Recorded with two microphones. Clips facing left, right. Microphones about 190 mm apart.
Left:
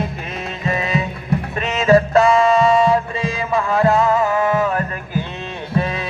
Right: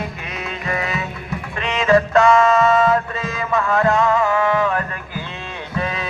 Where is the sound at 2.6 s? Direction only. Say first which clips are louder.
Left 1 dB; 30° left (ahead or behind).